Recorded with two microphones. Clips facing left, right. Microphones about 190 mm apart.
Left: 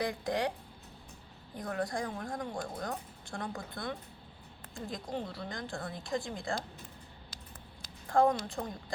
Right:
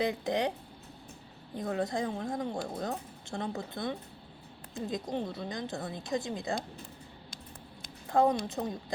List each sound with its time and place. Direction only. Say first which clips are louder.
0.0 s speech: right 3 dB; 20° right (ahead or behind)
1.5 s speech: right 3 dB; 20° right (ahead or behind)
8.1 s speech: right 1 dB; 20° right (ahead or behind)